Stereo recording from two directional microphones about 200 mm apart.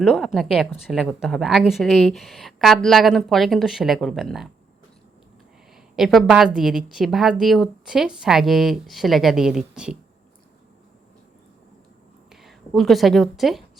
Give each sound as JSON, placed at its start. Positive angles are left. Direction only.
{"t": 0.0, "sound": "a woman's voice", "side_deg": 0}
{"t": 5.7, "sound": "a woman's voice", "side_deg": 0}
{"t": 12.3, "sound": "a woman's voice", "side_deg": 0}